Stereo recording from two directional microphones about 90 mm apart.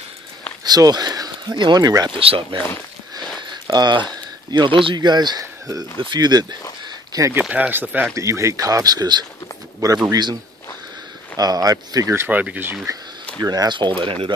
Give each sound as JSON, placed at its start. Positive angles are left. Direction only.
{"t": 0.7, "sound": "speech", "side_deg": -45}
{"t": 2.0, "sound": "speech", "side_deg": -85}
{"t": 3.6, "sound": "speech", "side_deg": -50}
{"t": 5.4, "sound": "speech", "side_deg": -40}
{"t": 7.1, "sound": "a sound", "side_deg": -40}
{"t": 7.4, "sound": "speech", "side_deg": -10}
{"t": 8.1, "sound": "speech", "side_deg": -35}
{"t": 11.3, "sound": "speech", "side_deg": -45}
{"t": 12.3, "sound": "speech", "side_deg": -20}
{"t": 13.4, "sound": "speech", "side_deg": -45}
{"t": 13.7, "sound": "speech", "side_deg": -65}